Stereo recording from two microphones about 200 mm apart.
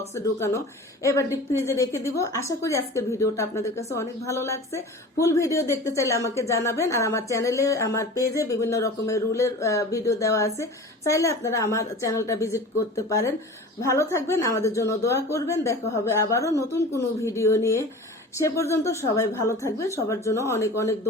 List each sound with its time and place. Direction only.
0.3 s a woman's voice: 15° left (ahead or behind)